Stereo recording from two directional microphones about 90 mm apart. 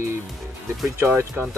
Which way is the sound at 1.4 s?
Centre (ahead or behind).